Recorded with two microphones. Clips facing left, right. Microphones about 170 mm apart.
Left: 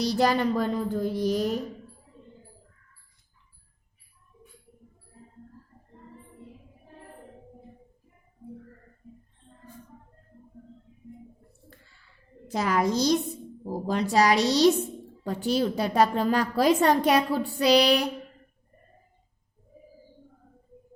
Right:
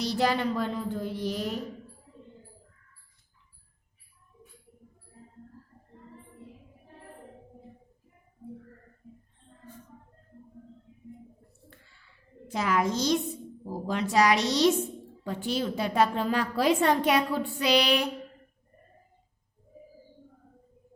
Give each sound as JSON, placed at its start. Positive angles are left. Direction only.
{"t": 0.0, "sound": "a woman's voice", "side_deg": 40}
{"t": 12.5, "sound": "a woman's voice", "side_deg": 35}